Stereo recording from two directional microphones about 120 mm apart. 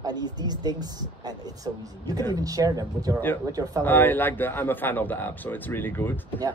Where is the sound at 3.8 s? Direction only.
15° left (ahead or behind).